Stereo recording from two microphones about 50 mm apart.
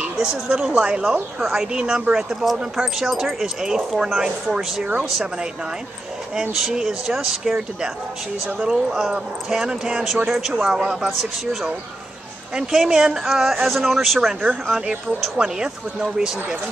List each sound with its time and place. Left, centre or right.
0.2 s speech: centre
10.0 s speech: centre
12.7 s speech: centre
15.4 s speech: centre